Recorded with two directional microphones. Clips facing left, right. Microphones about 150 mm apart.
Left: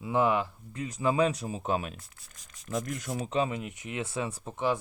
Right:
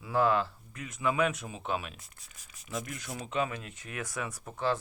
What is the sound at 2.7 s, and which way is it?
Speech, 45° left (ahead or behind).